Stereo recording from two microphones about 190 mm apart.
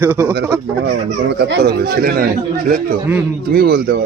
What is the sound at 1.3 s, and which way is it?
Speech, 60° right (ahead or behind).